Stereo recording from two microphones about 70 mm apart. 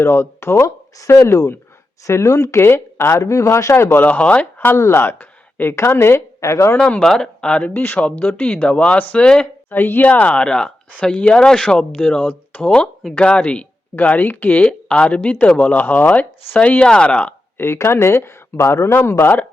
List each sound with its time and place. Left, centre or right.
0.0 s speech: left
0.6 s speech: left
2.6 s speech: left
4.0 s speech: left
4.7 s speech: left
6.7 s speech: centre
7.7 s speech: left; by 9.5 s centre
9.6 s speech: left
14.6 s speech: centre
17.6 s speech: left